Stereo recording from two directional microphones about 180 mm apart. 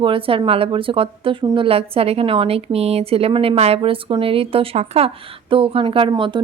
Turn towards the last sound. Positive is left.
turn(degrees=-25)  # may be behind; listen again after turning